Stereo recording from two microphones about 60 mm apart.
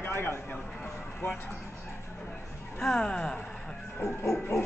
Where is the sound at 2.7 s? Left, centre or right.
Centre.